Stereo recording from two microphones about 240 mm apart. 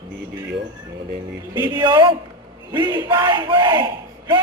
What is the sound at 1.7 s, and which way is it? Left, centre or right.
Battle cry, centre.